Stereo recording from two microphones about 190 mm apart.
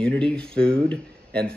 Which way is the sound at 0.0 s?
5° left (ahead or behind).